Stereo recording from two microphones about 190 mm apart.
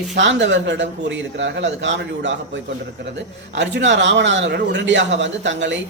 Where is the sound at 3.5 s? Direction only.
65° right (ahead or behind).